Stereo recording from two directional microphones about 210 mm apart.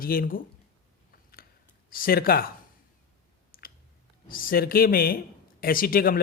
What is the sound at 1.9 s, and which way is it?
Speech, 45° left (ahead or behind).